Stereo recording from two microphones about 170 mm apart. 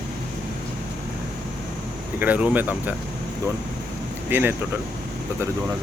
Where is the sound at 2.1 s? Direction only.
10° right (ahead or behind).